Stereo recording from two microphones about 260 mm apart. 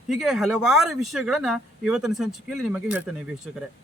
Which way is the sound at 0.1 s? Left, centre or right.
Centre.